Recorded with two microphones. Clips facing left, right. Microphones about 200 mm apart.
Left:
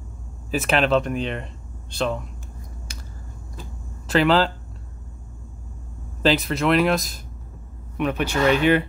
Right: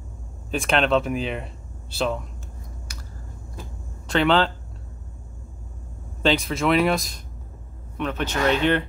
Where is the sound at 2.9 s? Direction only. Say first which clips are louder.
Left 2 dB; 25° left (ahead or behind).